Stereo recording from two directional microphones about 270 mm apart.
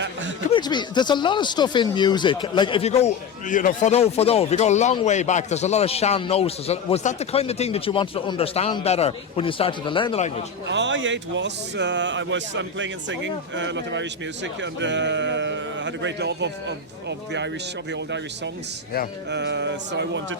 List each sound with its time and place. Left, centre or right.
0.5 s speech: centre
10.7 s speech: right
19.3 s speech: right